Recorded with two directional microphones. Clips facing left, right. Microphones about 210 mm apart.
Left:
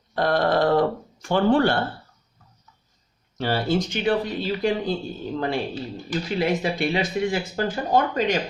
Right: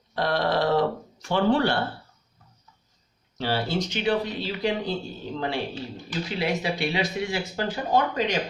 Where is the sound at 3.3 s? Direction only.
50° left (ahead or behind).